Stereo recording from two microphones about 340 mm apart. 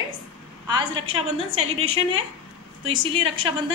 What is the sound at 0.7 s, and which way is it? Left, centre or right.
A woman's voice, centre.